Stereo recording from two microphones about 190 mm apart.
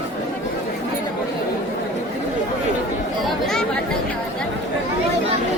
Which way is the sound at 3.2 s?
Centre (ahead or behind).